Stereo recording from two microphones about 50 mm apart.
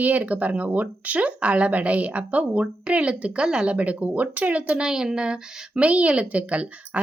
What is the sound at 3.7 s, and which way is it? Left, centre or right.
Speech, right.